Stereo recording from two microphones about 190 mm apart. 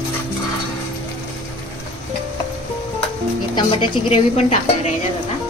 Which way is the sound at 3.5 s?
30° left (ahead or behind).